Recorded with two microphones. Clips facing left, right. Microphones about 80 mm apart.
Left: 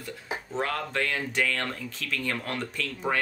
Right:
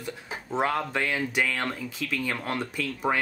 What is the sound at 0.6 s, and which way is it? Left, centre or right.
Speech, centre.